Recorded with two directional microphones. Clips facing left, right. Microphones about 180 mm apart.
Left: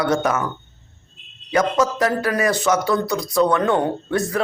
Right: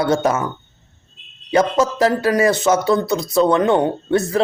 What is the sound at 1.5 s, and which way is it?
Speech, 25° right (ahead or behind).